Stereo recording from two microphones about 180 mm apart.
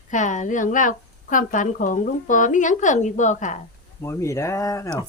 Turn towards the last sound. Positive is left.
turn(degrees=15)  # may be behind; listen again after turning